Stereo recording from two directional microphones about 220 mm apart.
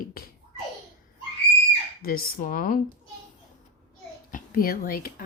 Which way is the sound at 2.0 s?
40° left (ahead or behind).